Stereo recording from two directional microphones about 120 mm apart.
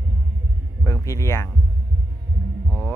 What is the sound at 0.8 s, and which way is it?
Music, 25° left (ahead or behind).